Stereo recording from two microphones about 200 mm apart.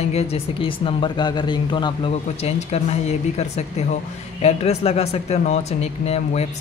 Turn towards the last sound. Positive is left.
turn(degrees=30)  # may be behind; listen again after turning